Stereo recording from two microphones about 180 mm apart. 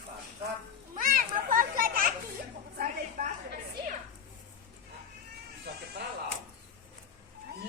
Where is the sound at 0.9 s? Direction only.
50° right (ahead or behind).